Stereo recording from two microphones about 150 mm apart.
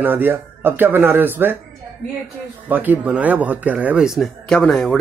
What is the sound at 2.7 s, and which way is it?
Speech, 10° right (ahead or behind).